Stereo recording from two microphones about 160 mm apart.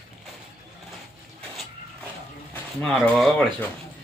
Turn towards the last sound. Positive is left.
turn(degrees=5)  # may be behind; listen again after turning